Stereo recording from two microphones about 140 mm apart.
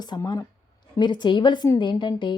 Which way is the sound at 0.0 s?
30° left (ahead or behind).